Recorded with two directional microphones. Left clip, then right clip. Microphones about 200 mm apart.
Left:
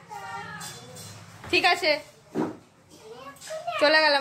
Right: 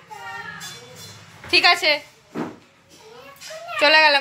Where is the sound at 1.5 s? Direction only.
5° left (ahead or behind).